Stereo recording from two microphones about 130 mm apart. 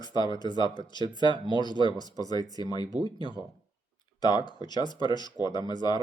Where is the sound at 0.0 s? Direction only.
35° left (ahead or behind).